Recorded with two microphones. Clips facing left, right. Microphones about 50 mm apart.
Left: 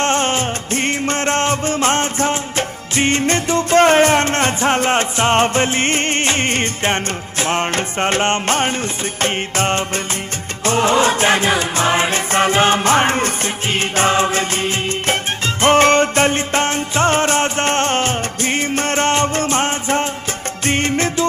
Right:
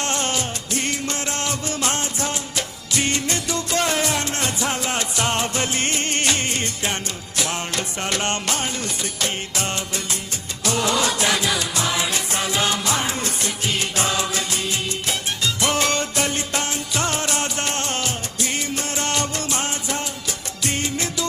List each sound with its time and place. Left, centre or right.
0.0 s music: left